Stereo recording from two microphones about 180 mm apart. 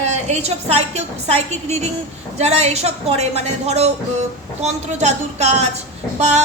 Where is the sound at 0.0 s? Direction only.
40° right (ahead or behind).